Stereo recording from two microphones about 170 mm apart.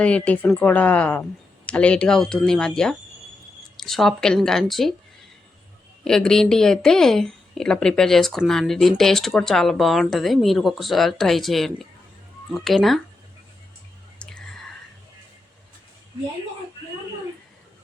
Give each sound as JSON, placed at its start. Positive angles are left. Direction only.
{"t": 0.0, "sound": "a woman's voice", "side_deg": 10}
{"t": 6.1, "sound": "speech", "side_deg": 5}
{"t": 14.2, "sound": "whispering", "side_deg": 5}